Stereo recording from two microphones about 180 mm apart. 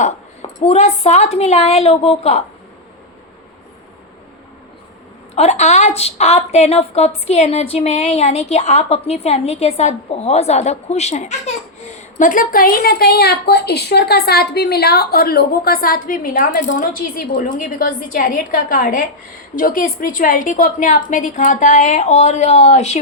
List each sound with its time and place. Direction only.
0.6 s a woman's voice: 35° left (ahead or behind)
5.3 s a woman's voice: 40° left (ahead or behind)